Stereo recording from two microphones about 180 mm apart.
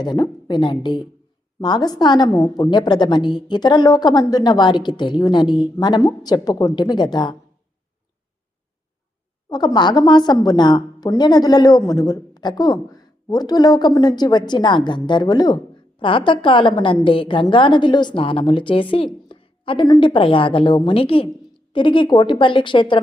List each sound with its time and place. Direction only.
0.0 s a woman's voice: 25° left (ahead or behind)
9.5 s a woman's voice: 20° left (ahead or behind)